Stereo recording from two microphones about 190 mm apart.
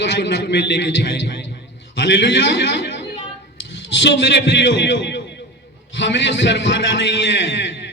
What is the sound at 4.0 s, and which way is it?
A man's voice, 70° left (ahead or behind).